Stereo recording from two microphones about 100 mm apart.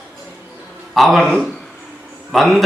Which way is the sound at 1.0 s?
Centre (ahead or behind).